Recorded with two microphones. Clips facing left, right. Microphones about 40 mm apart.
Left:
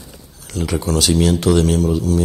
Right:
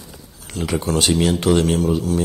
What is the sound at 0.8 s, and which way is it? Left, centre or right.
Speech, right.